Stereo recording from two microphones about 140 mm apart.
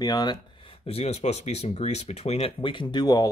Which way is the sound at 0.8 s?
45° left (ahead or behind).